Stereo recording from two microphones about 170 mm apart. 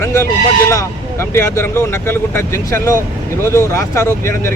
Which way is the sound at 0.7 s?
15° left (ahead or behind).